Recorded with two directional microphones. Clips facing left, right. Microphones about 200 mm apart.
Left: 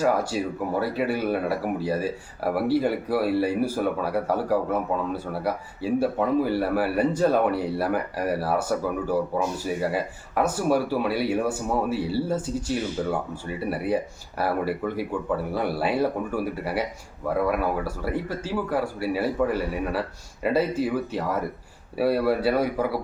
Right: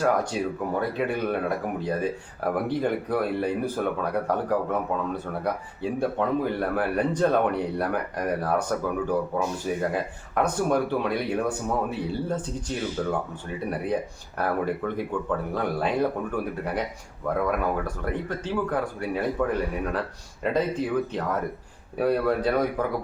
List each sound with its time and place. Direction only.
0.0 s speech: 5° left (ahead or behind)